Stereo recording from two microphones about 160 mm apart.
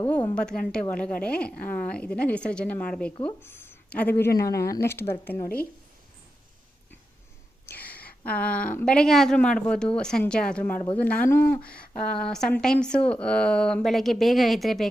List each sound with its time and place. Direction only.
0.7 s a woman's voice: 5° left (ahead or behind)
7.7 s a woman's voice: 10° left (ahead or behind)